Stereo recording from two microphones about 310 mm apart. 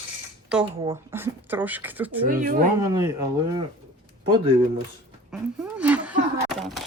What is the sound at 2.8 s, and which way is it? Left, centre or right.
Speech, centre.